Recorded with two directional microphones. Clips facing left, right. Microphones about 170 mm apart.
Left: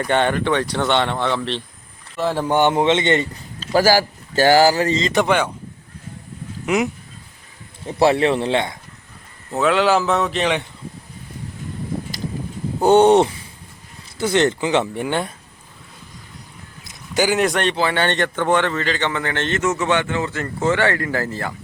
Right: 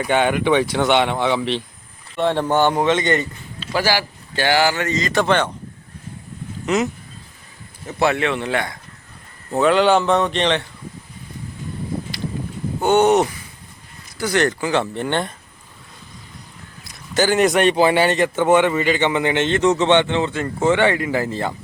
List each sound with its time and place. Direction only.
0.0 s a man's voice: 5° right (ahead or behind)
2.1 s a man's voice: 5° left (ahead or behind); by 3.4 s 25° left (ahead or behind)
3.6 s speech: 40° left (ahead or behind); by 5.5 s 10° left (ahead or behind)
6.7 s speech: 10° left (ahead or behind)
7.9 s speech: 30° left (ahead or behind)
9.5 s speech: centre (ahead or behind)
12.8 s a man's voice: 30° left (ahead or behind)
15.0 s speech: 5° left (ahead or behind)
16.8 s a sound: 20° left (ahead or behind)
17.2 s speech: centre (ahead or behind)
17.7 s a man's voice: 15° right (ahead or behind)